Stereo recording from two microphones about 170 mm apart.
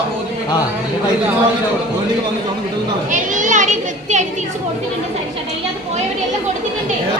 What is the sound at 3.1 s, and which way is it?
Children playing, 50° right (ahead or behind).